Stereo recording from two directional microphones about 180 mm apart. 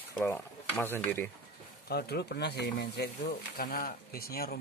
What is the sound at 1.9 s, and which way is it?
Speech, 60° left (ahead or behind).